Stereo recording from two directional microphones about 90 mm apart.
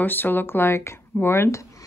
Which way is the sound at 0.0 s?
20° left (ahead or behind).